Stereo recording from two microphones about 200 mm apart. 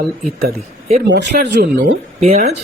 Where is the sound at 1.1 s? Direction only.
60° right (ahead or behind).